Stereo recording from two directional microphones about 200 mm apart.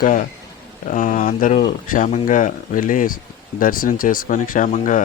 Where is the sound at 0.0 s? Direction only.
45° left (ahead or behind).